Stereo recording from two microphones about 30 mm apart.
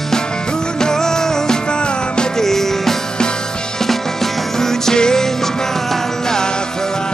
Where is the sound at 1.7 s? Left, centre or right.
Left.